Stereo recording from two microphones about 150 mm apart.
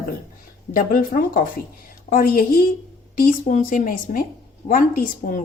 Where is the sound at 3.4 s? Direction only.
60° left (ahead or behind).